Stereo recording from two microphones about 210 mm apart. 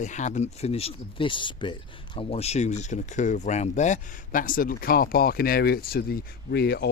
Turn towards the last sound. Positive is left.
turn(degrees=50)  # may be behind; listen again after turning